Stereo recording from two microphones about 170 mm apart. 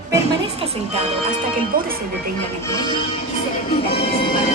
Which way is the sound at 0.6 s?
40° right (ahead or behind).